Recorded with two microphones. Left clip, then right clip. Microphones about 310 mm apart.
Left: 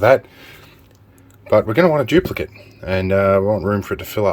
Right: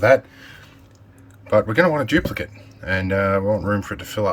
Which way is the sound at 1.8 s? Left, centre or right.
Left.